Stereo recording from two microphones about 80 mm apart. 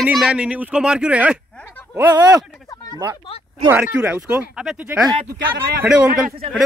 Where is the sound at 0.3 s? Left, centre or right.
Centre.